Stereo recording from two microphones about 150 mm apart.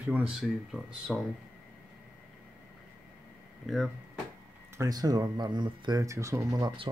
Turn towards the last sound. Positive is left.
turn(degrees=-25)  # may be behind; listen again after turning